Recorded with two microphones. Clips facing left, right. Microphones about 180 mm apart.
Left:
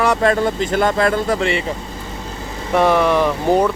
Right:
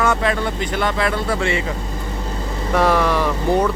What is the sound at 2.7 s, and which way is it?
Speech, 5° left (ahead or behind).